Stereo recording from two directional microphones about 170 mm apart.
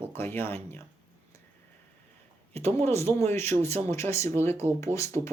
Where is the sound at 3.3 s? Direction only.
15° left (ahead or behind).